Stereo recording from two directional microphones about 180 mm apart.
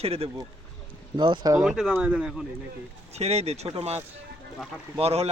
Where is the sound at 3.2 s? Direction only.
35° right (ahead or behind).